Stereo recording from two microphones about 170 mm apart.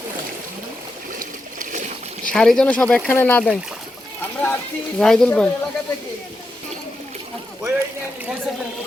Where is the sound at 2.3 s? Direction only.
Centre (ahead or behind).